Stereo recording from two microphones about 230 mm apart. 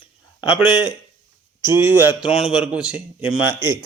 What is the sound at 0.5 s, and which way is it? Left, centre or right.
Speech, centre.